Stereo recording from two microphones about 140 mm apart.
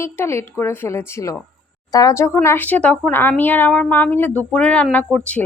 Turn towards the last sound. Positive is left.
turn(degrees=5)  # may be behind; listen again after turning